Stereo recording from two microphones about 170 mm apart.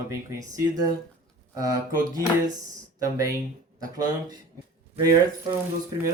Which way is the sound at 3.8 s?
20° right (ahead or behind).